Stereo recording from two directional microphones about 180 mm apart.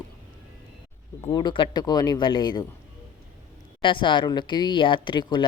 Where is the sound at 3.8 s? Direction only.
25° left (ahead or behind).